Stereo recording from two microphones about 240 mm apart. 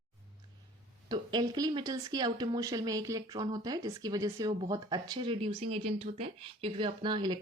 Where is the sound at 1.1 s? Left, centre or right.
Centre.